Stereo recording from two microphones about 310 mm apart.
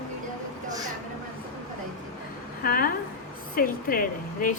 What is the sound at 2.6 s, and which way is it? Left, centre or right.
A woman's voice, left.